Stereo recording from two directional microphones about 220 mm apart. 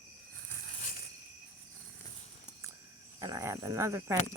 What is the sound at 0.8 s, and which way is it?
Cricket, 35° left (ahead or behind).